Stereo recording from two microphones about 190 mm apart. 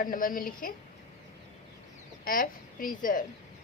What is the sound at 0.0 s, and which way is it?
Speech, 45° left (ahead or behind).